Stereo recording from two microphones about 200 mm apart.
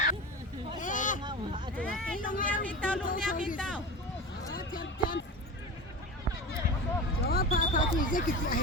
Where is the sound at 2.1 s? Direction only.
45° left (ahead or behind).